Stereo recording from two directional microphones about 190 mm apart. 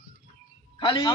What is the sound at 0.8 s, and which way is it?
Speech, 25° left (ahead or behind).